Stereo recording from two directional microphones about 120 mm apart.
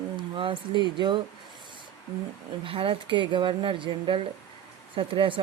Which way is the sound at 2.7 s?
50° right (ahead or behind).